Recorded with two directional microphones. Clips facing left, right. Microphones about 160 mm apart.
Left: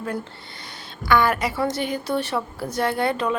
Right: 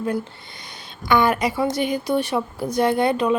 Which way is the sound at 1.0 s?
20° right (ahead or behind).